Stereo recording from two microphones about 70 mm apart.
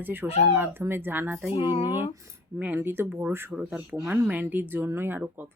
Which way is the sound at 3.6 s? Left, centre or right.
Right.